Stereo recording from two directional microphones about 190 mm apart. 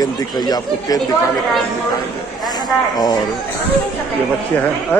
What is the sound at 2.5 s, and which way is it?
Speech, 20° left (ahead or behind).